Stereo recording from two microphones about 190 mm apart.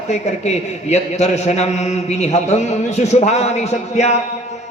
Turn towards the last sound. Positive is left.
turn(degrees=35)  # may be behind; listen again after turning